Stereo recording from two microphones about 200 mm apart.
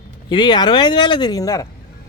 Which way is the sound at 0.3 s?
20° left (ahead or behind).